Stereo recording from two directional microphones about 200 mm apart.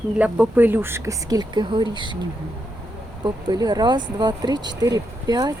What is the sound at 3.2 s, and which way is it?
Speech, 20° right (ahead or behind).